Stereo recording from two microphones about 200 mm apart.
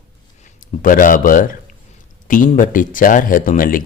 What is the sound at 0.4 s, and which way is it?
A man's voice, 40° left (ahead or behind).